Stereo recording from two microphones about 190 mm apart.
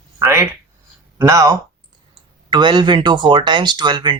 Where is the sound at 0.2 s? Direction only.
10° right (ahead or behind).